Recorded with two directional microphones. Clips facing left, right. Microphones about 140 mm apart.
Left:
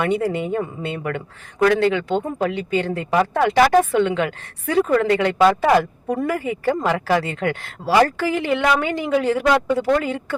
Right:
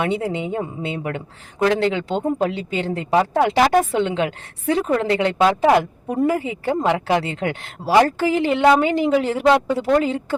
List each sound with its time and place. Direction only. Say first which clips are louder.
0.0 s a woman's voice: left 2 dB; 25° right (ahead or behind)